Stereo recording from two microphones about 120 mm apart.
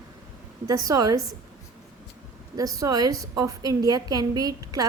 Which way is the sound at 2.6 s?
30° right (ahead or behind).